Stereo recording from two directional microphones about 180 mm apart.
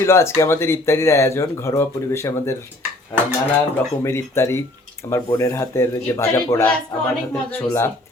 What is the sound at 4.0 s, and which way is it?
Speech, 15° left (ahead or behind).